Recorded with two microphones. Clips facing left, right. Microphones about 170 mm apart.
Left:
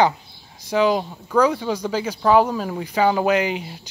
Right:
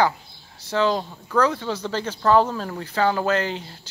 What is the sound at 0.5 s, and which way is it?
Speech, 15° left (ahead or behind).